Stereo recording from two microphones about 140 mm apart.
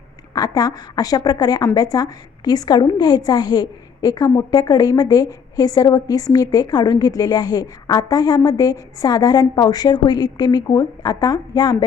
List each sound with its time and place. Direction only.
0.3 s a woman's voice: 25° left (ahead or behind)